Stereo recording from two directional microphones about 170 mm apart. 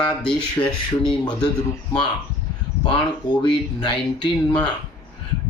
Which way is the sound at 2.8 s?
25° left (ahead or behind).